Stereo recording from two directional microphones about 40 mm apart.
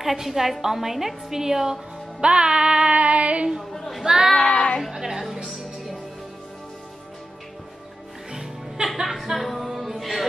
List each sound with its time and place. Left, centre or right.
0.0 s a woman's voice: centre
2.2 s music: right
3.0 s female singing: right
3.7 s a sound: centre
4.0 s a woman's voice: centre
4.5 s speech: left
4.9 s a woman's voice: centre
8.3 s music: centre